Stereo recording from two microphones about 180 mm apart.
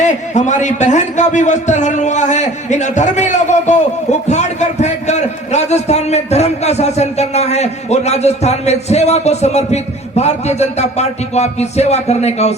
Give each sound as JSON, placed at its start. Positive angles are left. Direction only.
{"t": 0.0, "sound": "a man's voice", "side_deg": 40}